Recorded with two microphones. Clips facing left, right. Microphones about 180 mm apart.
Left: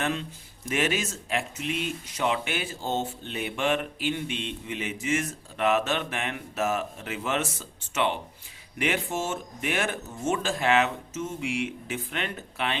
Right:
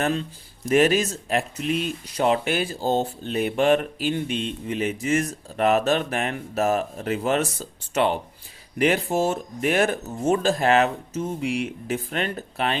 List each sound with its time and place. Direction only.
0.0 s speech: 35° right (ahead or behind)